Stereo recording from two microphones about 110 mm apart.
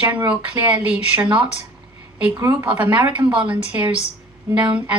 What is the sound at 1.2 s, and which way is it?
Speech, 50° right (ahead or behind).